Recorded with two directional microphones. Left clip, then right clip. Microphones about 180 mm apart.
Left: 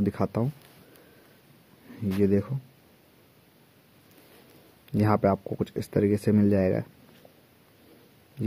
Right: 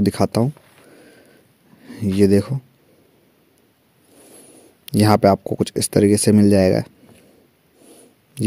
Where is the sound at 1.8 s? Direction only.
45° right (ahead or behind).